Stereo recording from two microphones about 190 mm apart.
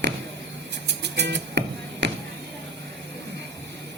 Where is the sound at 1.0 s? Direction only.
65° right (ahead or behind).